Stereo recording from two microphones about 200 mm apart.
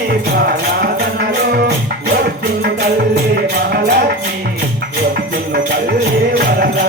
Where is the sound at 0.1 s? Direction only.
50° right (ahead or behind).